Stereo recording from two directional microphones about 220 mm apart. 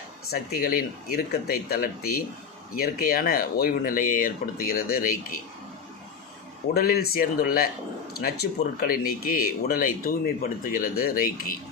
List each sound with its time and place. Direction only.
0.3 s speech: 45° left (ahead or behind)
6.7 s speech: 45° left (ahead or behind)